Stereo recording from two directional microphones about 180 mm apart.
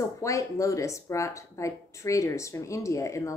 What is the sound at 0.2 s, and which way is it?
Speech, 15° left (ahead or behind).